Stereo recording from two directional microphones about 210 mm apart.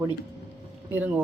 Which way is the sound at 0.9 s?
10° right (ahead or behind).